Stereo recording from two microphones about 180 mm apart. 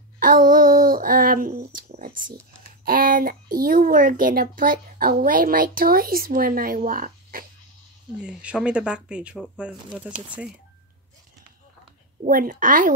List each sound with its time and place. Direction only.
0.2 s a sound: 50° right (ahead or behind)
2.8 s a child's voice: 50° right (ahead or behind)
8.2 s speech: 5° right (ahead or behind)
12.3 s a child's voice: 50° right (ahead or behind)